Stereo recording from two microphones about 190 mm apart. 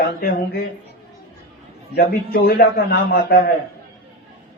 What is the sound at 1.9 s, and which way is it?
A man's voice, 55° left (ahead or behind).